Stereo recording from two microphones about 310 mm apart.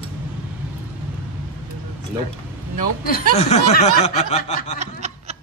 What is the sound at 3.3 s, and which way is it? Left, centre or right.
Speech, left.